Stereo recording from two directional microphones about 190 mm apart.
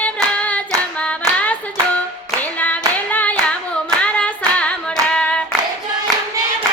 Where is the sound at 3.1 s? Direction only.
10° left (ahead or behind).